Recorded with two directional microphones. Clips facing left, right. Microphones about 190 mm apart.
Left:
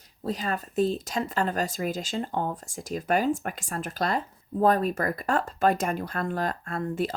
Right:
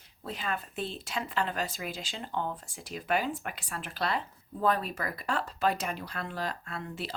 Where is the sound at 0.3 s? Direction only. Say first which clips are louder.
Left 6 dB; 40° left (ahead or behind).